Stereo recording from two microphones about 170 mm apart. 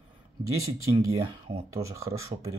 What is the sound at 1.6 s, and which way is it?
Speech, 20° right (ahead or behind).